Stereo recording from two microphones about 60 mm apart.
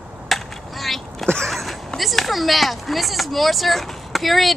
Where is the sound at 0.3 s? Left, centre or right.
Centre.